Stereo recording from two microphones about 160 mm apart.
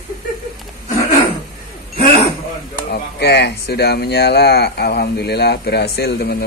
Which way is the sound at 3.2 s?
85° left.